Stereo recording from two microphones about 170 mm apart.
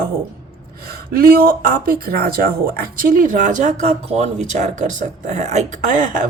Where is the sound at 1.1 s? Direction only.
60° right (ahead or behind).